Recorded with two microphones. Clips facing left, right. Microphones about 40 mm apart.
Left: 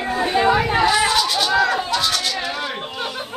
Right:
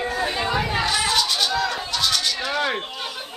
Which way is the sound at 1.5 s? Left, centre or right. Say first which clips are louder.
Left 6 dB; left.